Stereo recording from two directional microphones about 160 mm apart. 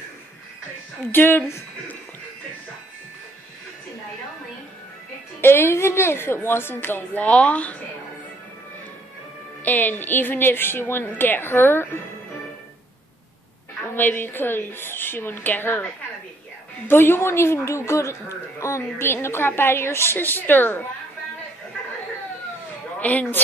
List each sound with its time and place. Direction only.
1.1 s speech: 10° left (ahead or behind)
5.4 s speech: 15° left (ahead or behind)
9.7 s speech: 10° left (ahead or behind)
13.9 s speech: 10° left (ahead or behind)
22.9 s a woman's voice: 10° left (ahead or behind)